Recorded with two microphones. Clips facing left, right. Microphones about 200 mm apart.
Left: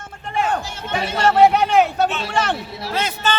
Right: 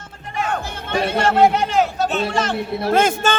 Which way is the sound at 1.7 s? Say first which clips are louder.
Left 2 dB; 60° left (ahead or behind).